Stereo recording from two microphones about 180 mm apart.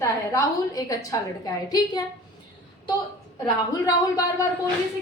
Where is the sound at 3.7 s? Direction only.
20° left (ahead or behind).